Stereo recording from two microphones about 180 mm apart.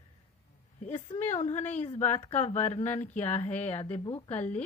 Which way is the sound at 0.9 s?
30° left (ahead or behind).